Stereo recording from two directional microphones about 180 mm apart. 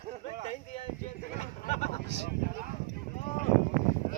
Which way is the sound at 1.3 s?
40° left (ahead or behind).